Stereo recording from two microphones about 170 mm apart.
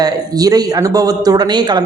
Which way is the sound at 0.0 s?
20° right (ahead or behind).